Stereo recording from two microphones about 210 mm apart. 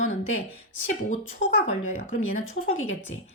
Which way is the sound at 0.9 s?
35° left (ahead or behind).